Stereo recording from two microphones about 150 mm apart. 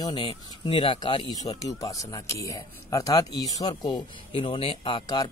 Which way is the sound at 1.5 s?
25° left (ahead or behind).